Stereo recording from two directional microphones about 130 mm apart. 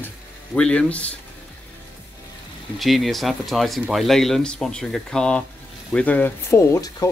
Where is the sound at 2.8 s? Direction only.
Centre (ahead or behind).